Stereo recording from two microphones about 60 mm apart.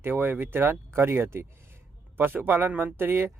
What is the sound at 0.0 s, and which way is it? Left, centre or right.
A man's voice, right.